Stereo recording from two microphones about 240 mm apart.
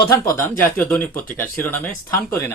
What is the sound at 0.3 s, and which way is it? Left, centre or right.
A man's voice, centre.